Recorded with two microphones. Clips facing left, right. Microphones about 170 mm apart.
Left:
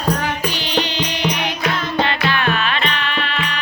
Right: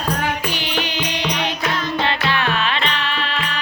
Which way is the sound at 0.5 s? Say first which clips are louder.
Left 3 dB; 15° right (ahead or behind).